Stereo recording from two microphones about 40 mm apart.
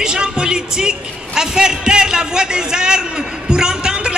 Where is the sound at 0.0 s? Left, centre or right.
Right.